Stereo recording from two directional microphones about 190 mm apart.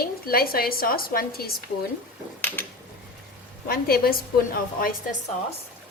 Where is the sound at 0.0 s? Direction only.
50° left (ahead or behind).